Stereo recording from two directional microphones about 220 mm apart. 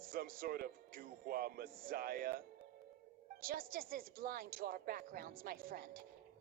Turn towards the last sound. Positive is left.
turn(degrees=-40)  # may be behind; listen again after turning